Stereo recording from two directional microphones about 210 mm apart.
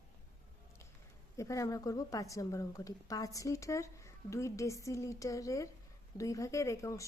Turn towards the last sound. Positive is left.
turn(degrees=15)  # may be behind; listen again after turning